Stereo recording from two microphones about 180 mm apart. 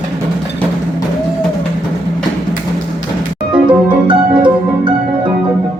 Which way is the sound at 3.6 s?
25° right (ahead or behind).